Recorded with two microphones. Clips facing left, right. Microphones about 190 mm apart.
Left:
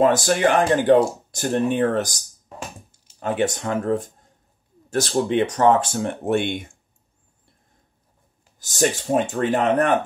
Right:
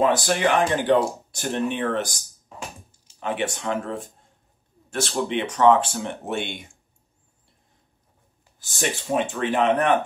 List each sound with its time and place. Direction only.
0.0 s speech: 45° left (ahead or behind)
3.2 s speech: 40° left (ahead or behind)
8.5 s speech: 40° left (ahead or behind)